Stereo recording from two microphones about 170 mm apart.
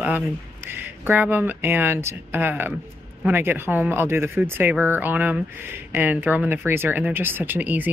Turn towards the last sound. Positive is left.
turn(degrees=-10)  # may be behind; listen again after turning